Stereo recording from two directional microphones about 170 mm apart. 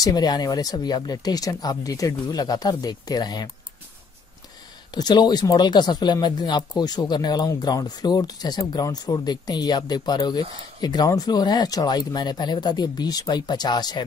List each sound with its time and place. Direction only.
0.0 s speech: 25° left (ahead or behind)
4.9 s speech: 25° left (ahead or behind)